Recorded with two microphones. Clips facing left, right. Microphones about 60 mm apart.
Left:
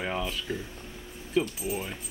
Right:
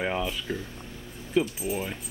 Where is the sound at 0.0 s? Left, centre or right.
Centre.